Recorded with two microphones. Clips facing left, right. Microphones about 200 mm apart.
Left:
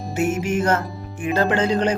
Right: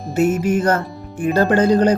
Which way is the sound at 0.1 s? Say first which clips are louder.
Right 5 dB; 40° right (ahead or behind).